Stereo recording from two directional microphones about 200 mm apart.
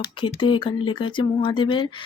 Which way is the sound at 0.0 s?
25° left (ahead or behind).